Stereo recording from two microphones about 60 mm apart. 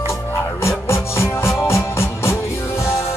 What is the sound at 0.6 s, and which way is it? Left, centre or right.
Music, left.